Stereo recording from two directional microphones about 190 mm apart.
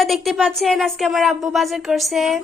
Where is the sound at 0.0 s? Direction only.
Centre (ahead or behind).